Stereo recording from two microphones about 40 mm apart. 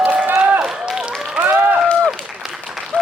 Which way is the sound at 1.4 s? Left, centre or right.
Right.